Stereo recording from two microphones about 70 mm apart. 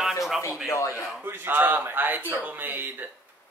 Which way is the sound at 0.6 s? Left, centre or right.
Left.